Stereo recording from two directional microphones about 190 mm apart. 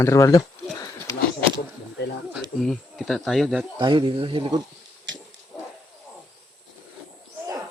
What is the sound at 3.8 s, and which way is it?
Speech, 25° right (ahead or behind).